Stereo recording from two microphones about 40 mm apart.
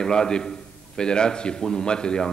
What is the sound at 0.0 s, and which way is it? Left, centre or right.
A man's voice, centre.